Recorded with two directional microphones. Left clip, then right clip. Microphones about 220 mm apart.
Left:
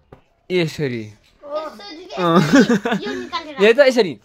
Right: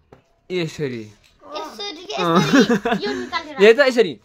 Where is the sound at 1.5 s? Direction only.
50° right (ahead or behind).